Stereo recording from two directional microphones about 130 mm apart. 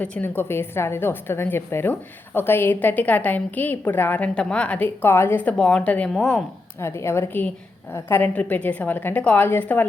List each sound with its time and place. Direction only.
0.0 s a woman's voice: 15° left (ahead or behind)
6.7 s a woman's voice: 20° left (ahead or behind)